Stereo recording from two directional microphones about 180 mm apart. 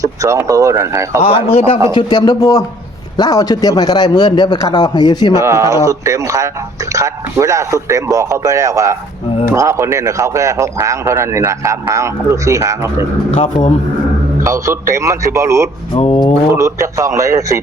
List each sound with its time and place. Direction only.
0.0 s a man's voice: 20° right (ahead or behind)
1.2 s a man's voice: 35° left (ahead or behind)
5.4 s a man's voice: 15° right (ahead or behind)
14.4 s a man's voice: 15° right (ahead or behind)
15.9 s a man's voice: 30° left (ahead or behind)
16.6 s a man's voice: 15° right (ahead or behind)